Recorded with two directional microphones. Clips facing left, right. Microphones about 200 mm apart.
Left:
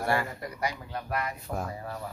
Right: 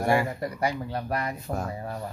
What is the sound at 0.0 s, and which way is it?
Speech, 15° right (ahead or behind).